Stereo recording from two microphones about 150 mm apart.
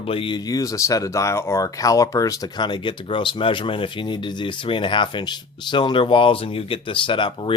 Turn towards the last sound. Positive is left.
turn(degrees=35)  # may be behind; listen again after turning